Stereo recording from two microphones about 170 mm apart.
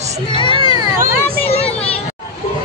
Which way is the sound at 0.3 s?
30° left (ahead or behind).